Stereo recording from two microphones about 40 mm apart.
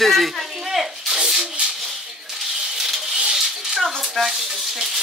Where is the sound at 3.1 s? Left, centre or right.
Centre.